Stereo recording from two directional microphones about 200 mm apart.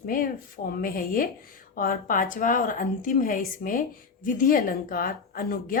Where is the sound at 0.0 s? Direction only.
45° left (ahead or behind).